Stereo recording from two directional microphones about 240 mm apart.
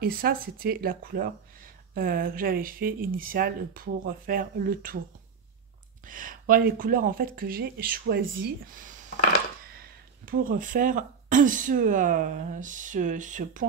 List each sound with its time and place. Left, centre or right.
0.0 s speech: right
6.0 s speech: right